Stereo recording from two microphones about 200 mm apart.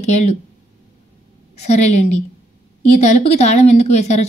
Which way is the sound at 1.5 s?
35° left (ahead or behind).